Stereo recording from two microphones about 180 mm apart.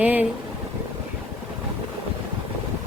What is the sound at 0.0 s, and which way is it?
Speech, 5° right (ahead or behind).